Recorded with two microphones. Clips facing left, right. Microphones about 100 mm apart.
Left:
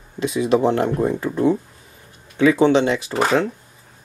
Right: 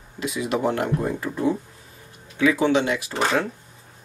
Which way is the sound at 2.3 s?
25° left (ahead or behind).